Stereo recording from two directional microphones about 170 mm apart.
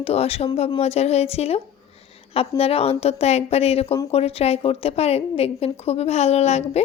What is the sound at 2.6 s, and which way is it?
Speech, 35° left (ahead or behind).